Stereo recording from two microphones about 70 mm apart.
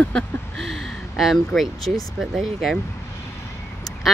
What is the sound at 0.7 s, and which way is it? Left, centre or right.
Speech, centre.